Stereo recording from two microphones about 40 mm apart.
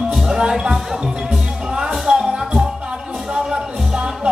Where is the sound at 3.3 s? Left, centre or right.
Centre.